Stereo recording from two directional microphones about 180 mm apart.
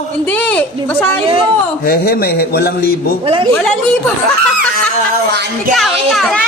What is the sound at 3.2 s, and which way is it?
Speech, 30° right (ahead or behind).